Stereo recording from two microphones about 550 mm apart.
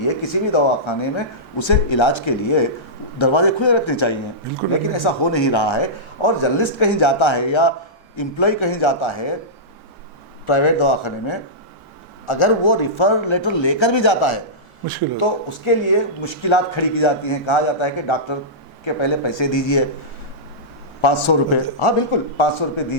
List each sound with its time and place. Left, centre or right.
0.0 s speech: left
10.4 s speech: left
21.0 s speech: left